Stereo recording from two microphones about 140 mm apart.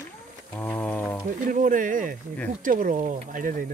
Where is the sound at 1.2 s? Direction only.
70° right (ahead or behind).